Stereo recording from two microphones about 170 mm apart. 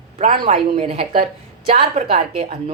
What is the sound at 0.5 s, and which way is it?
A woman's voice, 35° right (ahead or behind).